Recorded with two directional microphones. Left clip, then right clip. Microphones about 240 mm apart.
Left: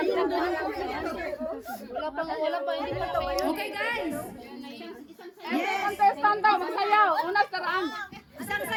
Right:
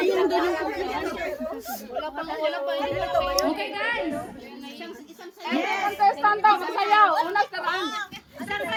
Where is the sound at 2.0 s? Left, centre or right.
Centre.